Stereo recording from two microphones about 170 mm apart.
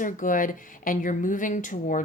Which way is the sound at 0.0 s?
50° left (ahead or behind).